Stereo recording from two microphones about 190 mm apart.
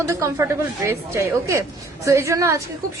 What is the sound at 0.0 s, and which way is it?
A woman's voice, 15° right (ahead or behind).